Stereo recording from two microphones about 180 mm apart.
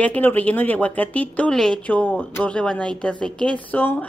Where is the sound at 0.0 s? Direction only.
10° left (ahead or behind).